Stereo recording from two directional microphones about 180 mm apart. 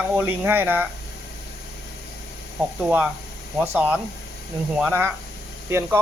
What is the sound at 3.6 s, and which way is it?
Speech, 10° right (ahead or behind).